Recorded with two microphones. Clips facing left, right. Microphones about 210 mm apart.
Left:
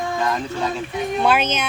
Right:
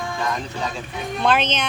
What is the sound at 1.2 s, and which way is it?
Speech, 10° left (ahead or behind).